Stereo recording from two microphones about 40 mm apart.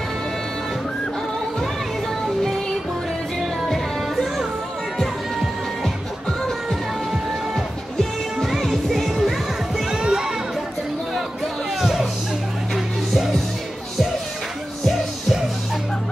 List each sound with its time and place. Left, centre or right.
3.3 s music: centre
8.4 s music: centre
9.8 s children playing: centre
11.1 s music: centre
14.9 s music: centre